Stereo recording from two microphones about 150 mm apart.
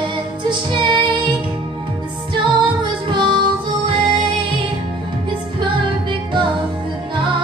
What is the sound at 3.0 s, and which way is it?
Music, 30° right (ahead or behind).